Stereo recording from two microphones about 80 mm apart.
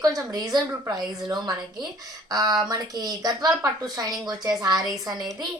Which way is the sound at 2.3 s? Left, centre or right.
Right.